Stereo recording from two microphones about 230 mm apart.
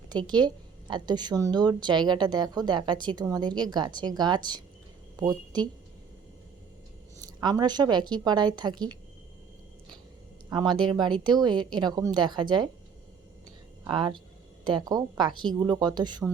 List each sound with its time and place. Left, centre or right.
0.1 s a woman's voice: centre
7.2 s a woman's voice: centre
10.5 s a woman's voice: centre
13.8 s a woman's voice: centre